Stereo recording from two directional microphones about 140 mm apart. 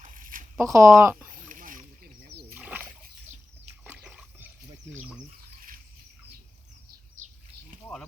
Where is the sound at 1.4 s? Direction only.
75° right (ahead or behind).